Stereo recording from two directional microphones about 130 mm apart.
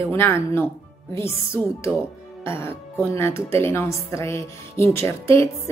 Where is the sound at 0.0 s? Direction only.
20° left (ahead or behind).